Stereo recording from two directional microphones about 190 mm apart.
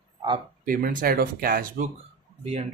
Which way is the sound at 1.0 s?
50° right (ahead or behind).